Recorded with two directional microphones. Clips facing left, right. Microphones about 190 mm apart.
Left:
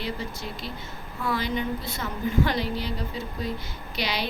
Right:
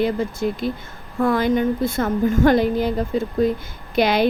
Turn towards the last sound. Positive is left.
turn(degrees=-50)  # may be behind; listen again after turning